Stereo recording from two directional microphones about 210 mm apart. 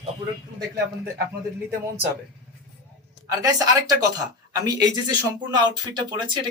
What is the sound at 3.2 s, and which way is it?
Speech, 15° right (ahead or behind).